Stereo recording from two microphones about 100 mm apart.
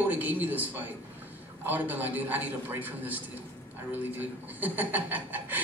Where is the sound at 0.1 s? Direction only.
15° right (ahead or behind).